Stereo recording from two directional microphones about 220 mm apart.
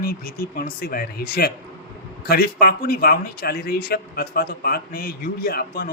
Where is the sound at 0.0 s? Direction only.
40° left (ahead or behind).